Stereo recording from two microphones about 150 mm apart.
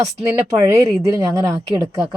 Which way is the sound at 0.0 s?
20° right (ahead or behind).